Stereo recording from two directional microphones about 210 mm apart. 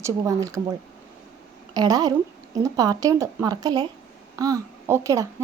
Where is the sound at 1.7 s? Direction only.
15° right (ahead or behind).